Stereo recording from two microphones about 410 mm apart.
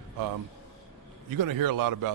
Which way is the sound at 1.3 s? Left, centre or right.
Right.